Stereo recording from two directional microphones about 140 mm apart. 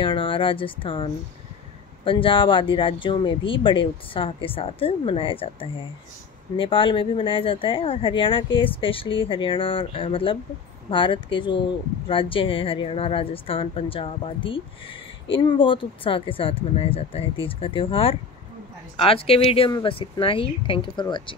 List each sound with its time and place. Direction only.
0.0 s a woman's voice: 40° left (ahead or behind)